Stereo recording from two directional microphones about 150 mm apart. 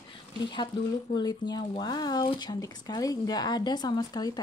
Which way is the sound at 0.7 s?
30° left (ahead or behind).